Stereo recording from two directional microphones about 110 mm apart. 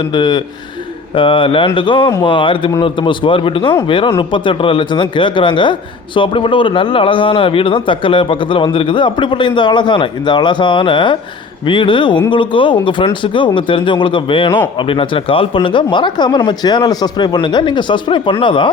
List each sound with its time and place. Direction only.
0.0 s speech: 45° left (ahead or behind)